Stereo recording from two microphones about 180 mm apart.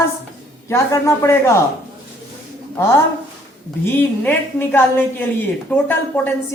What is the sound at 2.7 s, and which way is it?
A woman's voice, 15° left (ahead or behind).